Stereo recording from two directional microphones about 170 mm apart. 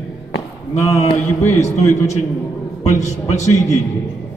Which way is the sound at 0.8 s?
15° left (ahead or behind).